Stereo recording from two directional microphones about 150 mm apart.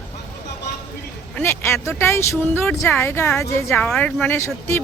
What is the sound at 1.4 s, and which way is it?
Speech, 15° left (ahead or behind).